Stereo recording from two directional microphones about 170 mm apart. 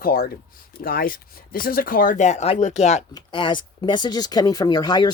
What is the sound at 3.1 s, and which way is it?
Speech, 25° left (ahead or behind).